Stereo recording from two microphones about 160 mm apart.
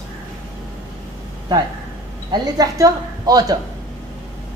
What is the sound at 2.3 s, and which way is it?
A woman's voice, 25° right (ahead or behind).